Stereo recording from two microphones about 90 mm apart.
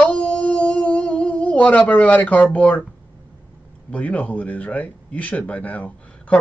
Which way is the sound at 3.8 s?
15° left (ahead or behind).